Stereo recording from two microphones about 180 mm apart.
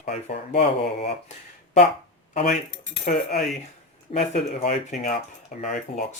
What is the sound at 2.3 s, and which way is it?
Speech, 45° left (ahead or behind).